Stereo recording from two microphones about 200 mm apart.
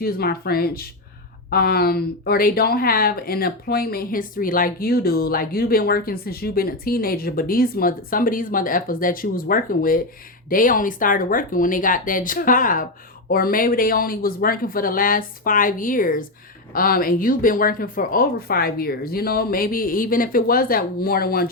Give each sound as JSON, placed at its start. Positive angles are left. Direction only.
{"t": 0.0, "sound": "speech", "side_deg": 50}